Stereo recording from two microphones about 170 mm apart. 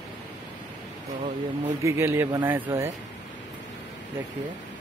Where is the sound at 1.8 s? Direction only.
15° right (ahead or behind).